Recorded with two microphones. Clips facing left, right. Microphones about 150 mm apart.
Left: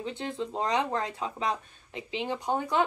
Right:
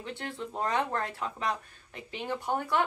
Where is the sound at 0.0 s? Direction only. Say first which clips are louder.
Left 4 dB; 20° left (ahead or behind).